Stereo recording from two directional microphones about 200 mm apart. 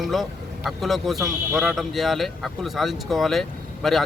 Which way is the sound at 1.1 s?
15° right (ahead or behind).